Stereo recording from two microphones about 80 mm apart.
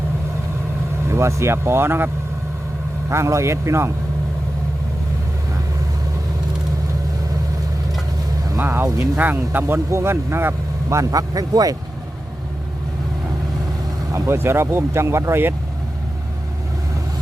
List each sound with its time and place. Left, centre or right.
1.0 s speech: right
3.1 s speech: right
8.6 s speech: right
14.1 s speech: right